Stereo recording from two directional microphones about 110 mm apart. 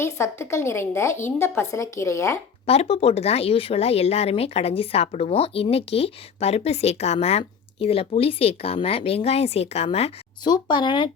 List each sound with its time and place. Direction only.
0.0 s speech: 25° left (ahead or behind)
2.6 s speech: 65° left (ahead or behind)
10.4 s speech: 40° left (ahead or behind)